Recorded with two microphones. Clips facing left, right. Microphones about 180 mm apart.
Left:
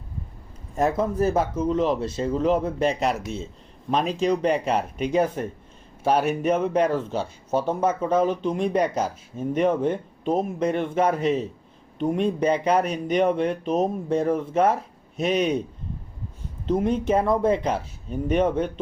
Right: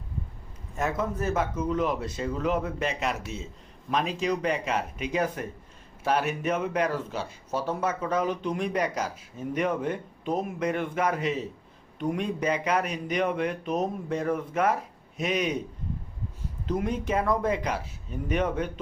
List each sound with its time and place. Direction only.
0.8 s speech: 35° left (ahead or behind)
16.6 s speech: 30° left (ahead or behind)